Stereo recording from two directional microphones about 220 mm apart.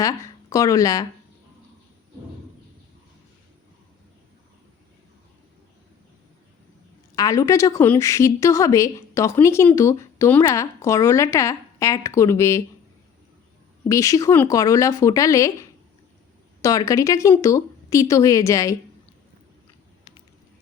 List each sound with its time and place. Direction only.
0.0 s speech: 15° left (ahead or behind)
7.2 s a woman's voice: 15° left (ahead or behind)
13.8 s a woman's voice: 15° left (ahead or behind)
16.6 s a woman's voice: 15° left (ahead or behind)